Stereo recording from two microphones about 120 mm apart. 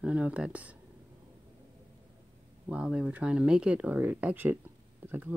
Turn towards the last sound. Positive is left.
turn(degrees=-15)  # may be behind; listen again after turning